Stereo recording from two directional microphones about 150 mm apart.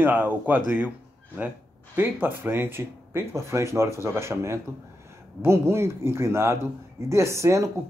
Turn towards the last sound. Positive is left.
turn(degrees=-20)  # may be behind; listen again after turning